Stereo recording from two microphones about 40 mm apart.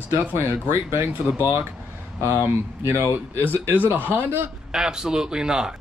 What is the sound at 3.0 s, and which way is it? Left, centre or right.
Speech, right.